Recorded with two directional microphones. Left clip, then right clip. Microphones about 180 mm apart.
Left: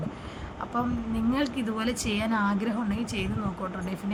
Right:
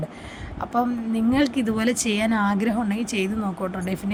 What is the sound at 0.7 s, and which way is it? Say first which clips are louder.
A woman's voice: right 7 dB; 30° right (ahead or behind).